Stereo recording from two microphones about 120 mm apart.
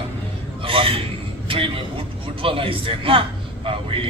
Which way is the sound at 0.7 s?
50° right (ahead or behind).